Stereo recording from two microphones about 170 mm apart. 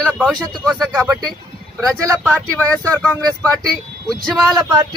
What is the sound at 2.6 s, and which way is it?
Speech, 20° right (ahead or behind).